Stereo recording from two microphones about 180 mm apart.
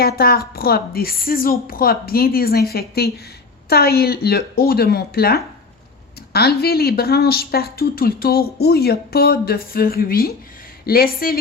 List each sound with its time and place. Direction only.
0.0 s speech: 60° left (ahead or behind)